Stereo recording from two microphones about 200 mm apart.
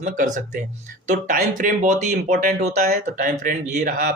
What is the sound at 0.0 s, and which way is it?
Speech, 40° right (ahead or behind).